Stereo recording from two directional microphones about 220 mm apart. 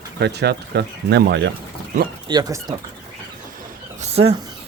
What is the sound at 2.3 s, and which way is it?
Speech, 15° right (ahead or behind).